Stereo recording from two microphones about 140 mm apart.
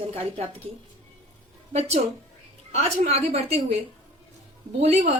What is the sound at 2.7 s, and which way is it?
A woman's voice, 50° right (ahead or behind).